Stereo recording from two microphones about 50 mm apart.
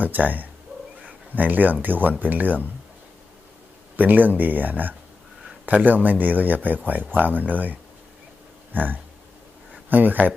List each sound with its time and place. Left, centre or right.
0.0 s speech: right
3.9 s speech: right